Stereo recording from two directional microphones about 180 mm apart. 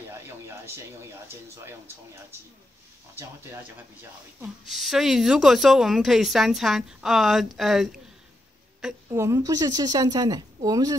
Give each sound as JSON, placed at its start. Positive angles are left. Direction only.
{"t": 1.3, "sound": "speech", "side_deg": -15}
{"t": 4.4, "sound": "a woman's voice", "side_deg": 0}
{"t": 9.1, "sound": "a woman's voice", "side_deg": -15}